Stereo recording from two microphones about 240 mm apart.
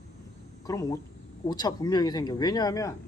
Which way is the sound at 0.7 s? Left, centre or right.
Centre.